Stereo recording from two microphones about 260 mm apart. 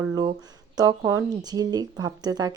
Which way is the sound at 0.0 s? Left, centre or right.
Centre.